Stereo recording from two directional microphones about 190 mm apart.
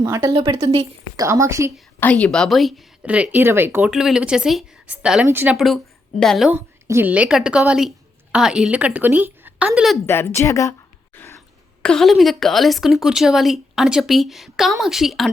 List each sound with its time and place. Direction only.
0.0 s a woman's voice: 15° right (ahead or behind)
2.0 s a woman's voice: 10° left (ahead or behind)
6.8 s a woman's voice: 10° right (ahead or behind)
10.1 s a sound: 10° left (ahead or behind)
11.8 s a woman's voice: 5° left (ahead or behind)